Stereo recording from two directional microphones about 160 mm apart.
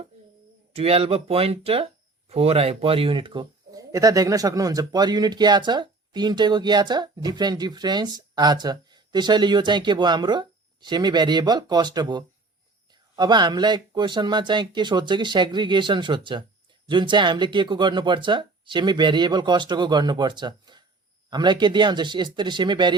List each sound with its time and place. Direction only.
0.7 s speech: 40° right (ahead or behind)